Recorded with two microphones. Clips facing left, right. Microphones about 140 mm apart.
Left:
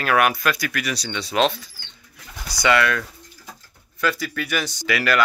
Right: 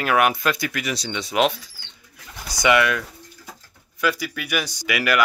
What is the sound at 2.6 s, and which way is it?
Speech, 15° right (ahead or behind).